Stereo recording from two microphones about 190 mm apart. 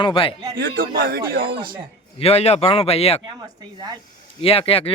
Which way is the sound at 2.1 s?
35° left (ahead or behind).